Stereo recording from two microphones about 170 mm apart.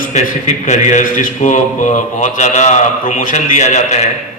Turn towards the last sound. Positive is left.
turn(degrees=40)  # may be behind; listen again after turning